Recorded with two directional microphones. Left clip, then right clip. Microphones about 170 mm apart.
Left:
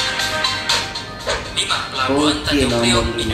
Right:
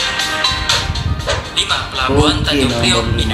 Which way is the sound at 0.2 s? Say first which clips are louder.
Right 3 dB; 20° right (ahead or behind).